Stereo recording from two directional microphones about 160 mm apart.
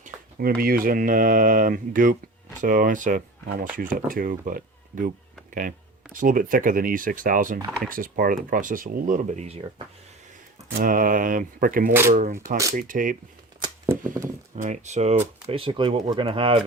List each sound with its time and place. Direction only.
0.0 s speech: 70° right (ahead or behind)
6.1 s speech: 60° right (ahead or behind); by 9.8 s 40° right (ahead or behind)
10.8 s speech: 60° right (ahead or behind)
13.8 s a sound: 15° right (ahead or behind)
14.5 s speech: 45° right (ahead or behind)
15.4 s speech: 35° right (ahead or behind)